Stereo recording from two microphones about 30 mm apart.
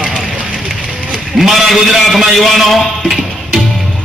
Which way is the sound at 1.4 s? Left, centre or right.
Centre.